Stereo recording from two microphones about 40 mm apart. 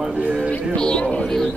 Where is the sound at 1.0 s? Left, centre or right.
Left.